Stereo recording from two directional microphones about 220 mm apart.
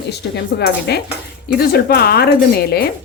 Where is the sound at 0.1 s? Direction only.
50° left (ahead or behind).